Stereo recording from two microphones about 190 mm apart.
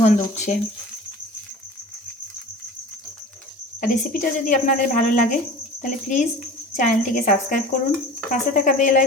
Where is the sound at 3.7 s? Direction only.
45° left (ahead or behind).